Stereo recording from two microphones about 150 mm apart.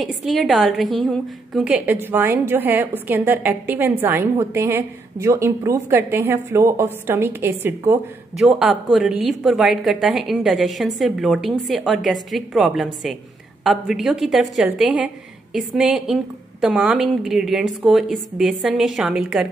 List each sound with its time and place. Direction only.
0.0 s a woman's voice: centre (ahead or behind); by 8.0 s 15° right (ahead or behind)
8.4 s a woman's voice: 5° right (ahead or behind)